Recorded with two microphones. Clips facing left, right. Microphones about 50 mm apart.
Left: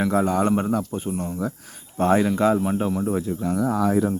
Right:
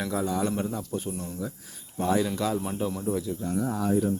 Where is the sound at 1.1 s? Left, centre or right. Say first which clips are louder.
Left 7 dB; left.